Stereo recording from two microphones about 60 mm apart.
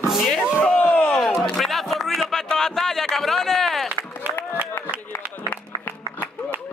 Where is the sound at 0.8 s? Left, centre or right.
Left.